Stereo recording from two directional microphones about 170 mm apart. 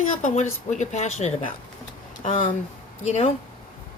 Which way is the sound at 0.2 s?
45° left (ahead or behind).